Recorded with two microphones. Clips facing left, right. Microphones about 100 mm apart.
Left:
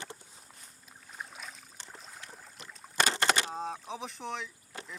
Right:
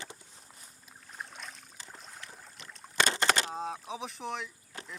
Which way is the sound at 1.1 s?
Centre (ahead or behind).